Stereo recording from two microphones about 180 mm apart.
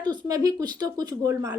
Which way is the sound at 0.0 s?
25° right (ahead or behind).